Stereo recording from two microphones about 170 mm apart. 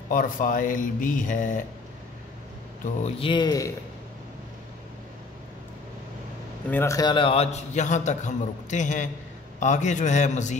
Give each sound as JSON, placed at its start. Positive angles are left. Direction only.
{"t": 0.1, "sound": "a man's voice", "side_deg": 50}
{"t": 3.2, "sound": "speech", "side_deg": 30}
{"t": 6.7, "sound": "a man's voice", "side_deg": 15}